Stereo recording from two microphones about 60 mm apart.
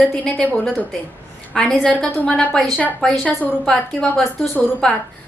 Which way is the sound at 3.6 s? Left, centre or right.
Centre.